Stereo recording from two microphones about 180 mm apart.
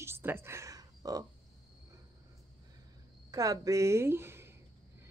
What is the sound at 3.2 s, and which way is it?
A woman's voice, 20° right (ahead or behind).